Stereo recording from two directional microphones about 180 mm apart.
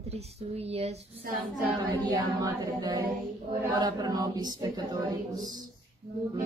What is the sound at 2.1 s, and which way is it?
Speech, 25° right (ahead or behind).